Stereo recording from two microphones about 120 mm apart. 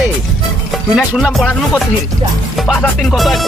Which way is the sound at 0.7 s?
Centre (ahead or behind).